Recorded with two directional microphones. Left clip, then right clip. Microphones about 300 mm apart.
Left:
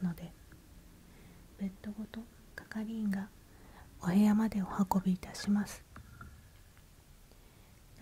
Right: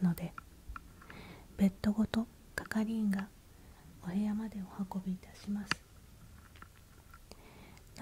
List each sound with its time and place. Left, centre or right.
0.0 s a sound: centre
1.6 s whispering: right
2.7 s whispering: centre
4.0 s speech: centre